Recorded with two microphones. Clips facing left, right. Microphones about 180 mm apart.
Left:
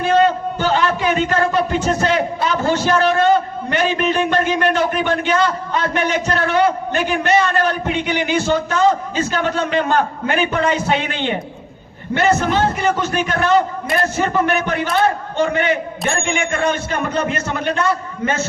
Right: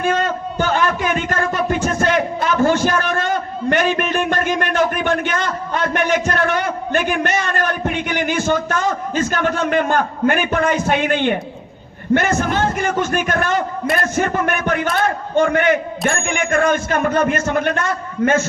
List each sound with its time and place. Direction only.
0.0 s a man's voice: 50° right (ahead or behind)